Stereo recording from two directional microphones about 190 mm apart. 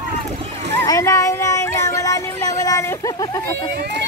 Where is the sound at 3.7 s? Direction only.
60° right (ahead or behind).